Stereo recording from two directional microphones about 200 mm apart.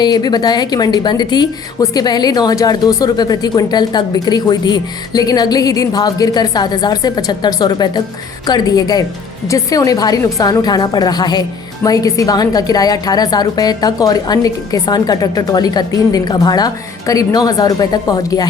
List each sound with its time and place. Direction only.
0.0 s a woman's voice: 20° left (ahead or behind)